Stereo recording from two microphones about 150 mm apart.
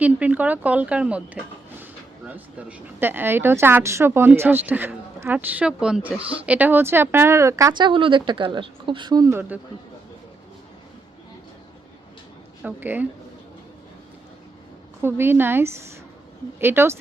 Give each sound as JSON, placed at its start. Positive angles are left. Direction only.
{"t": 0.0, "sound": "a woman's voice", "side_deg": -10}
{"t": 12.6, "sound": "a woman's voice", "side_deg": -10}
{"t": 15.0, "sound": "a woman's voice", "side_deg": -15}